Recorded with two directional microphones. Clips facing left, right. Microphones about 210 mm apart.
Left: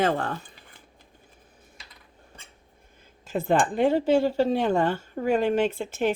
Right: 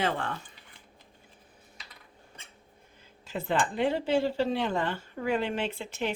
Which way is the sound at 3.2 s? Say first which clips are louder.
Left 6 dB; 50° left (ahead or behind).